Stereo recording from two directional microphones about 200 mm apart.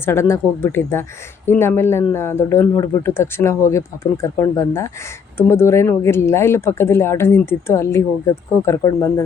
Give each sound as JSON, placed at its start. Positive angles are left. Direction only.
{"t": 0.0, "sound": "speech", "side_deg": 10}